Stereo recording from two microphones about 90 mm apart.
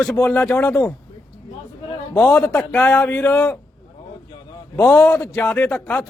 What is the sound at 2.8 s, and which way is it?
Speech, 20° left (ahead or behind).